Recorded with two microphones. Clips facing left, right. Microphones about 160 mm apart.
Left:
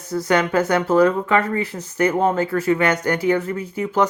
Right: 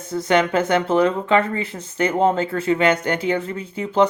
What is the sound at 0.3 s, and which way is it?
Speech, 25° right (ahead or behind).